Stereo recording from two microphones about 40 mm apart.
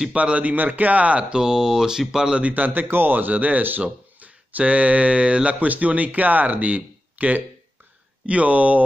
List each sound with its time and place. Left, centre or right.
0.1 s speech: right
1.3 s speech: centre
2.5 s speech: right